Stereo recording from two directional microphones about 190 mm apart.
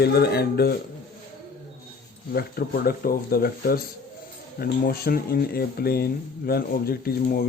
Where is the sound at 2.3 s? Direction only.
55° left (ahead or behind).